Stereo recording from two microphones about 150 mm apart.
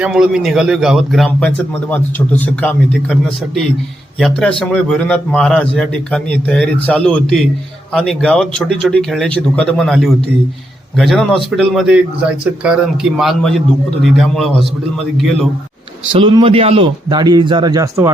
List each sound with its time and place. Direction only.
0.0 s a man's voice: 5° right (ahead or behind)
16.1 s a man's voice: 35° right (ahead or behind)